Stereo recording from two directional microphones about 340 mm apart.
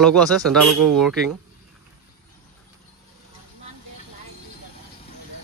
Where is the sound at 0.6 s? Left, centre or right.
Right.